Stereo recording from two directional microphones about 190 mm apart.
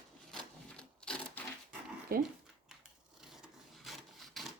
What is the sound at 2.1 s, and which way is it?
Speech, 50° right (ahead or behind).